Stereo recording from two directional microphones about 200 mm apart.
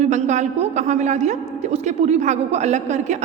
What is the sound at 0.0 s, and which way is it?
A woman's voice, 35° right (ahead or behind).